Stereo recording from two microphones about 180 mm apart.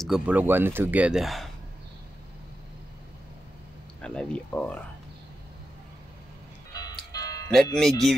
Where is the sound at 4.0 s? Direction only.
5° left (ahead or behind).